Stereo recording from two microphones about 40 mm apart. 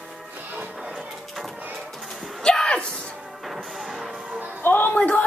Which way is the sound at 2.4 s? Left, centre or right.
Left.